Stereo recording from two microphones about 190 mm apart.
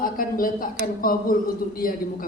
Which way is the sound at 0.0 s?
50° left (ahead or behind).